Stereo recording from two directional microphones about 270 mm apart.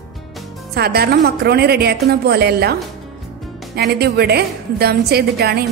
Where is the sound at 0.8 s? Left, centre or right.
Right.